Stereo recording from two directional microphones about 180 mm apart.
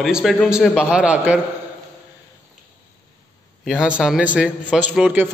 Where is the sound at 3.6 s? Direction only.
5° right (ahead or behind).